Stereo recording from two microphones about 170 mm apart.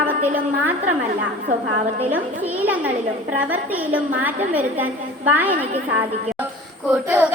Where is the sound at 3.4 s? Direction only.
10° right (ahead or behind).